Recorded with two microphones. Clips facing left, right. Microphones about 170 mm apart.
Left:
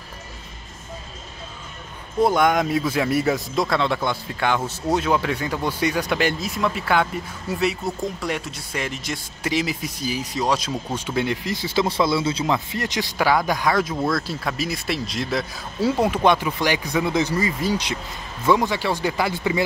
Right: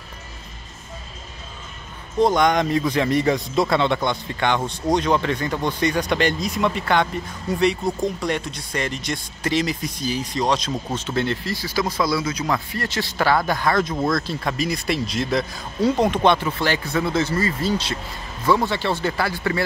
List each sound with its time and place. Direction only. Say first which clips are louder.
2.1 s speech: right 1 dB; 5° left (ahead or behind)